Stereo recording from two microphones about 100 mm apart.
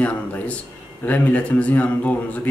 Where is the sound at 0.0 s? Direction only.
15° left (ahead or behind).